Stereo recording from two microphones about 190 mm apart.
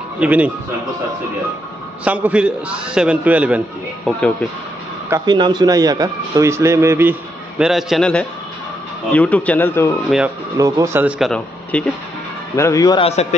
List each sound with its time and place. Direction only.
0.2 s speech: 5° right (ahead or behind)
2.0 s a man's voice: 5° right (ahead or behind)
5.1 s speech: 25° right (ahead or behind); by 9.9 s 10° left (ahead or behind)
10.6 s a man's voice: 15° right (ahead or behind); by 11.9 s 5° left (ahead or behind)
12.5 s a man's voice: 15° left (ahead or behind)
13.0 s a man's voice: 35° left (ahead or behind)